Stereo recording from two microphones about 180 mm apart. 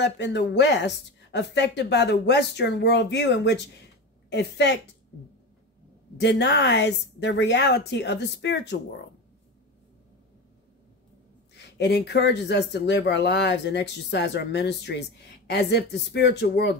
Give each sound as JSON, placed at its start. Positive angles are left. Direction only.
{"t": 0.0, "sound": "speech", "side_deg": 75}
{"t": 6.1, "sound": "speech", "side_deg": 75}
{"t": 11.5, "sound": "speech", "side_deg": 70}